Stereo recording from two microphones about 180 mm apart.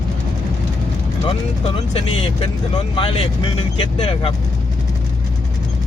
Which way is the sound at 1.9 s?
30° left (ahead or behind).